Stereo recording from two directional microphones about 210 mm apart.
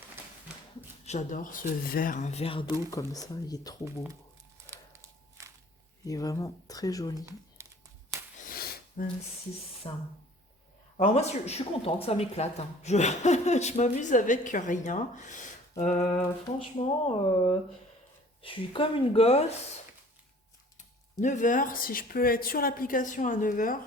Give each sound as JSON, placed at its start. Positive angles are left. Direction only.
{"t": 1.0, "sound": "speech", "side_deg": 35}
{"t": 4.6, "sound": "a sound", "side_deg": -15}
{"t": 6.1, "sound": "speech", "side_deg": 15}
{"t": 7.6, "sound": "a sound", "side_deg": -15}
{"t": 8.4, "sound": "snort", "side_deg": 45}
{"t": 9.8, "sound": "a woman's voice", "side_deg": 25}
{"t": 20.7, "sound": "speech", "side_deg": 35}